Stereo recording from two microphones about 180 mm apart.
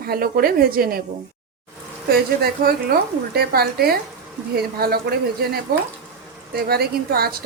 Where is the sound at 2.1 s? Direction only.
60° right (ahead or behind).